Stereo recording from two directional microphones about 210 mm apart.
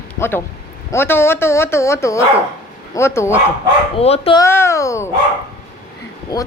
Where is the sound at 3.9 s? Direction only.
30° left (ahead or behind).